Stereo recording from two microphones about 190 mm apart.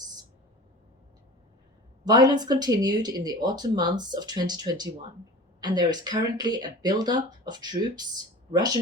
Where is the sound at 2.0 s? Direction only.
20° right (ahead or behind).